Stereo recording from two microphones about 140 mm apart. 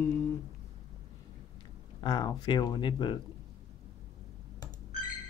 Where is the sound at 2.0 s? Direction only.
30° left (ahead or behind).